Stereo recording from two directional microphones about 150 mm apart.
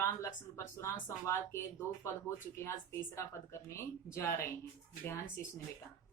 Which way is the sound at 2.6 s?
20° left (ahead or behind).